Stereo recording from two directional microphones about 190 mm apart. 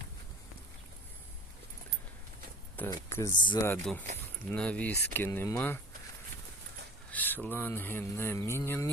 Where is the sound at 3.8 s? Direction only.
5° left (ahead or behind).